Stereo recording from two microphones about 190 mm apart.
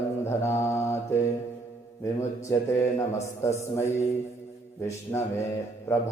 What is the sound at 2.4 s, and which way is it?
Mantra, 15° left (ahead or behind).